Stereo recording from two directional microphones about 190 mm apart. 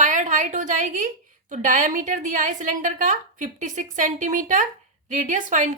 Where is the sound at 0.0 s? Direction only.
40° right (ahead or behind).